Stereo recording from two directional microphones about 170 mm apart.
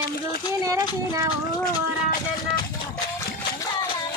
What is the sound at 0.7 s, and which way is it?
Speech, 20° right (ahead or behind).